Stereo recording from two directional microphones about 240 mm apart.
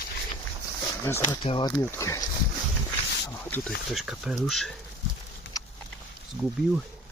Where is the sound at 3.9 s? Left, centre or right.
Centre.